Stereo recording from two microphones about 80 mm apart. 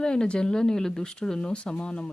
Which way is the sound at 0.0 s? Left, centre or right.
Centre.